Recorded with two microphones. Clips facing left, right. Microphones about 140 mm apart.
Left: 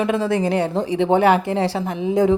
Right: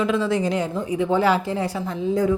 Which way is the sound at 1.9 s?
20° left (ahead or behind).